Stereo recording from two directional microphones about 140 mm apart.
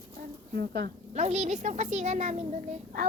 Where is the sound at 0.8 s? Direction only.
55° right (ahead or behind).